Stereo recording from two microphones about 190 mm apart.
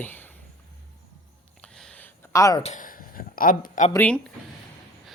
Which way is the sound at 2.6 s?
35° left (ahead or behind).